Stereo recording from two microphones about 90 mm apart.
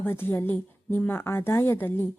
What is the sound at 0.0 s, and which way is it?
Speech, 25° left (ahead or behind).